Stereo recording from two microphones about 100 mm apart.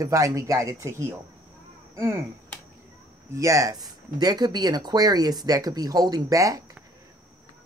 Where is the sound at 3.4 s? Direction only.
35° right (ahead or behind).